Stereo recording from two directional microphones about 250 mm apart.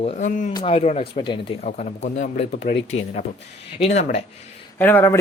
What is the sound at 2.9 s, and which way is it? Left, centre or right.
Speech, left.